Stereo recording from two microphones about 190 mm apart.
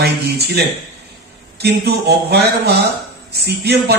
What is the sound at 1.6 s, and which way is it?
A man's voice, 60° right (ahead or behind).